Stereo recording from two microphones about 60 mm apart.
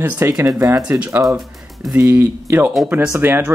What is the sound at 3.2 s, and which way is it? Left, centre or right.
Speech, right.